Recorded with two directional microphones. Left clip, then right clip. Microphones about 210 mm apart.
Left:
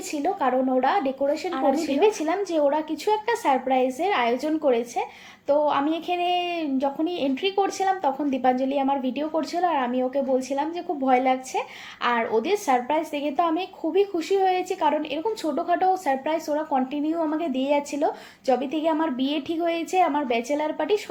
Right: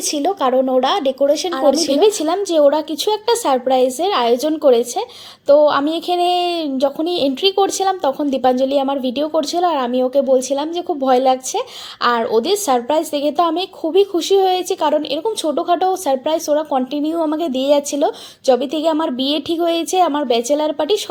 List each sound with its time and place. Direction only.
0.1 s a woman's voice: 50° right (ahead or behind)